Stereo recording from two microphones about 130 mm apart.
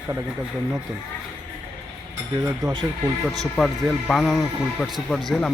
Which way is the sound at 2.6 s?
30° right (ahead or behind).